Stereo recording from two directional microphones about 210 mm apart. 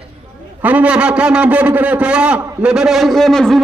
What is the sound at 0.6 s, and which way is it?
A man's voice, 5° right (ahead or behind).